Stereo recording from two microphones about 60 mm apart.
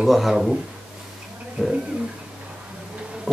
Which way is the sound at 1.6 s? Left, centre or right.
Centre.